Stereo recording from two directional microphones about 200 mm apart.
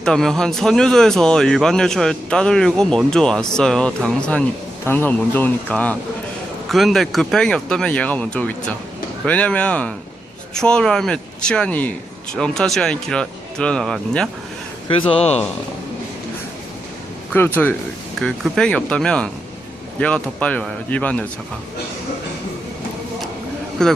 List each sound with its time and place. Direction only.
0.0 s a man's voice: centre (ahead or behind)
15.1 s speech: 30° left (ahead or behind)
17.3 s a man's voice: 10° left (ahead or behind)
23.8 s a man's voice: 5° left (ahead or behind)